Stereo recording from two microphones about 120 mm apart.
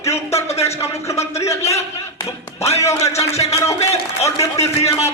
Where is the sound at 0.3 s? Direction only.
60° left (ahead or behind).